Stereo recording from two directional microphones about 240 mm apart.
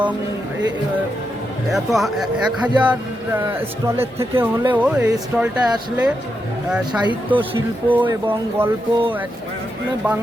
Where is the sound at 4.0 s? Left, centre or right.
Centre.